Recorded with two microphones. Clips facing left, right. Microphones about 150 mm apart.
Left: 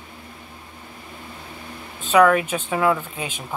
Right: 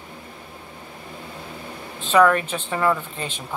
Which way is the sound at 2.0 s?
5° left (ahead or behind).